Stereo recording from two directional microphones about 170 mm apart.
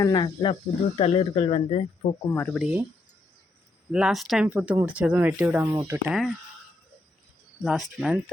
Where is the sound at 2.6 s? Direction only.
5° right (ahead or behind).